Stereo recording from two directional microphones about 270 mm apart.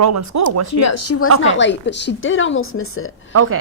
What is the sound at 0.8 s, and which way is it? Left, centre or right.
A woman's voice, left.